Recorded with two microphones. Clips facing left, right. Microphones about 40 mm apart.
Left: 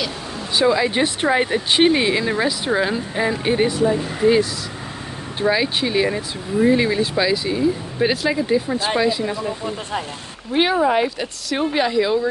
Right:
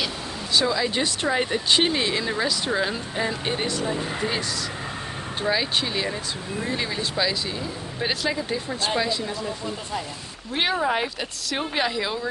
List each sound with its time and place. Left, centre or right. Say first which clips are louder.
0.6 s speech: left 6 dB; left
5.4 s speech: left 5 dB; centre
6.0 s speech: left 6 dB; left
9.2 s speech: left 6 dB; left
10.5 s speech: left 6 dB; centre